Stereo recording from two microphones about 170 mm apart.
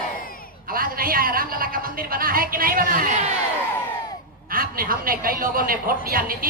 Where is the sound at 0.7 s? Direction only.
60° right (ahead or behind).